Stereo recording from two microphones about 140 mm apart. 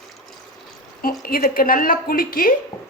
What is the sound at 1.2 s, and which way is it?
A woman's voice, 90° left.